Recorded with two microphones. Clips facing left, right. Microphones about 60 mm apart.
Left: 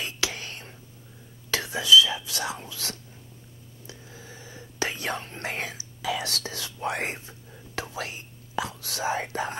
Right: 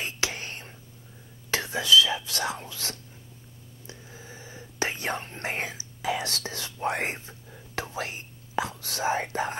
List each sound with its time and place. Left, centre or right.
0.0 s whispering: right
2.2 s speech: right